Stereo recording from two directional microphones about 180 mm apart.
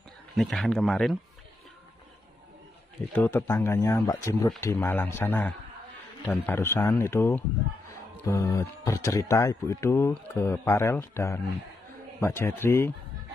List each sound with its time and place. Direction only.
0.3 s speech: centre (ahead or behind)
3.1 s speech: 10° left (ahead or behind)